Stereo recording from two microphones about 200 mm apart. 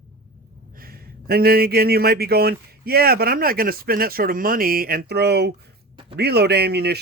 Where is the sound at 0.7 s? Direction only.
50° right (ahead or behind).